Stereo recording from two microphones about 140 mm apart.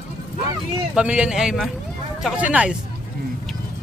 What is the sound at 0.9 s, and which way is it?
Speech, 10° right (ahead or behind).